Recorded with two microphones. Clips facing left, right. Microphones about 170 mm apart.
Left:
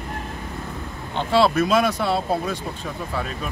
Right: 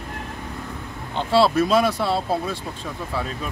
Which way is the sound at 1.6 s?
30° right (ahead or behind).